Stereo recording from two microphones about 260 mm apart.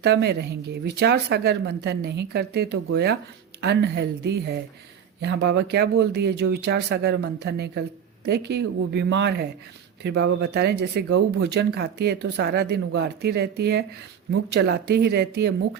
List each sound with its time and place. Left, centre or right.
0.0 s speech: right